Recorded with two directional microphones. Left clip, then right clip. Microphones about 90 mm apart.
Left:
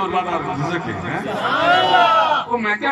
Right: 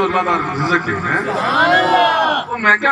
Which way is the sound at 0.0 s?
25° left (ahead or behind).